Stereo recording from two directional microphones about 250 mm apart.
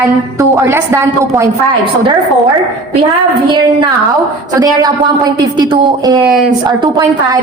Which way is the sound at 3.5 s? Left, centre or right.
Centre.